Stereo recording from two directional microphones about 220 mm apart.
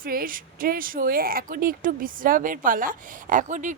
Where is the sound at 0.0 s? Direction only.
40° right (ahead or behind).